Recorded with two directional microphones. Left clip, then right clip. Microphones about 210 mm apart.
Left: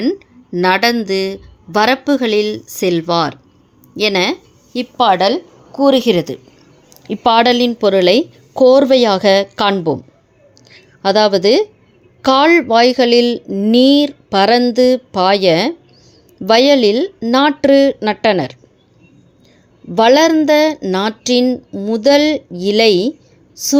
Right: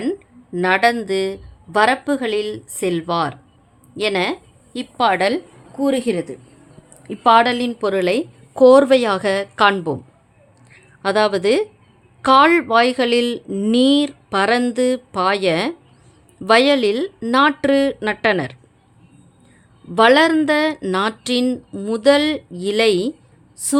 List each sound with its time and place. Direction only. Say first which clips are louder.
0.0 s a woman's voice: left 6 dB; 15° left (ahead or behind)
5.7 s speech: left 8 dB; 35° left (ahead or behind)
7.1 s speech: left 2 dB; 25° left (ahead or behind)
19.9 s speech: left 3 dB; 5° left (ahead or behind)